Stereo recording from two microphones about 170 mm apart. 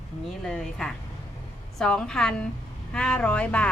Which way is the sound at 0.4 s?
5° left (ahead or behind).